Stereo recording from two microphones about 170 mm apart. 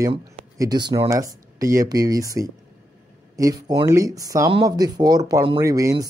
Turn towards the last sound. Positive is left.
turn(degrees=-20)  # may be behind; listen again after turning